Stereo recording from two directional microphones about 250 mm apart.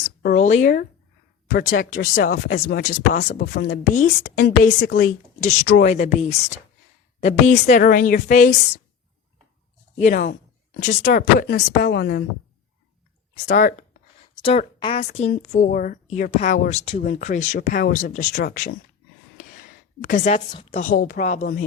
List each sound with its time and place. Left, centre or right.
0.0 s speech: left
10.0 s speech: left
13.5 s a woman's voice: left
20.0 s speech: left